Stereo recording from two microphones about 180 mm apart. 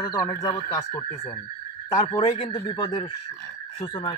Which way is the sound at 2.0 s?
30° left (ahead or behind).